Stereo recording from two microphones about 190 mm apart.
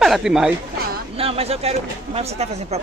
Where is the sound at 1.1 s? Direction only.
30° right (ahead or behind).